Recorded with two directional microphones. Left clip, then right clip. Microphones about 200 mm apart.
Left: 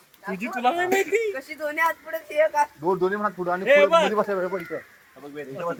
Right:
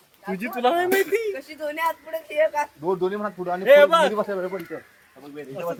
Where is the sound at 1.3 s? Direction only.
15° left (ahead or behind).